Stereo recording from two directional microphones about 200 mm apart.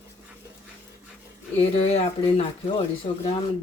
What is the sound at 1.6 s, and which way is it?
Speech, 30° left (ahead or behind).